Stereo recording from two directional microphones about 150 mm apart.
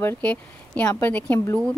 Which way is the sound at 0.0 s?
10° left (ahead or behind).